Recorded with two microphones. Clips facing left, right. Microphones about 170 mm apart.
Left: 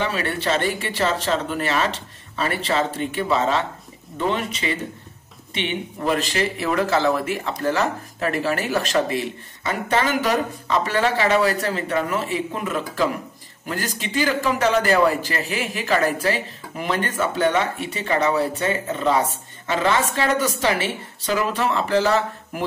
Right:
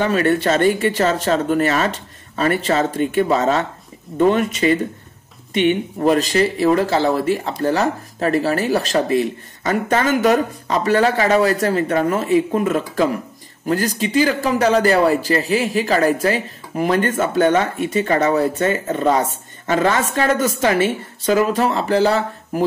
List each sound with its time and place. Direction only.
0.0 s a man's voice: 45° right (ahead or behind)